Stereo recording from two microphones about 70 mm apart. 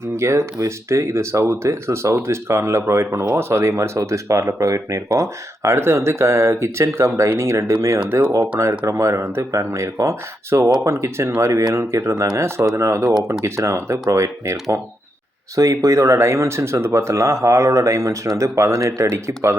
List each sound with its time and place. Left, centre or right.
0.2 s speech: right
15.5 s speech: right